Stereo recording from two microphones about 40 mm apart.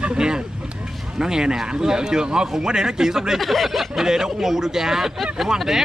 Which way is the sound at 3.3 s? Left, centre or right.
Centre.